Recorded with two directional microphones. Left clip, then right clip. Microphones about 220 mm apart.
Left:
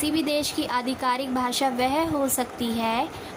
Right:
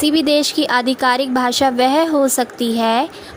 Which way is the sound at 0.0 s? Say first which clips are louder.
Right 10 dB; 30° right (ahead or behind).